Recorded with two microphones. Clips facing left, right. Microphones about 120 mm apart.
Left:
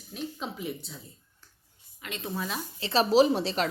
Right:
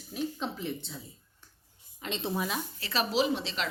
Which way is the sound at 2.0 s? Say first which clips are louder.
Right 3 dB; 30° right (ahead or behind).